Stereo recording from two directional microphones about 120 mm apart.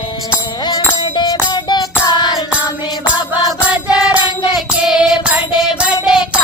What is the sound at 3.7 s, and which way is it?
Music, 10° right (ahead or behind).